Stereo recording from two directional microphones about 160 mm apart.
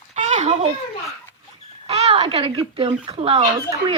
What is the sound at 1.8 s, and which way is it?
Speech, 40° right (ahead or behind).